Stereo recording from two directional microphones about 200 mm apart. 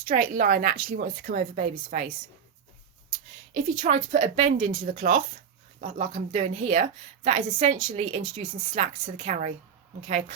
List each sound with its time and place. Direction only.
0.1 s a woman's voice: 45° right (ahead or behind)
3.5 s a woman's voice: 40° right (ahead or behind)